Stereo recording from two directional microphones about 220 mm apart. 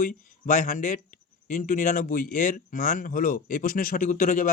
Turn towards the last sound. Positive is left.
turn(degrees=35)  # may be behind; listen again after turning